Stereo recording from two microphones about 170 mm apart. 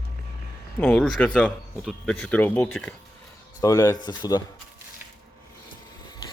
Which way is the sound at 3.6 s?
20° left (ahead or behind).